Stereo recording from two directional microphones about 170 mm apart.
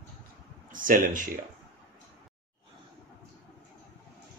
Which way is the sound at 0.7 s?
55° right (ahead or behind).